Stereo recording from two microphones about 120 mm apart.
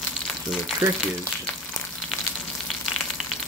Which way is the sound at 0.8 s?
20° right (ahead or behind).